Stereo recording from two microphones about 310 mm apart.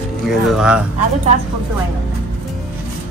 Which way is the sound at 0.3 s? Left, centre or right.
Centre.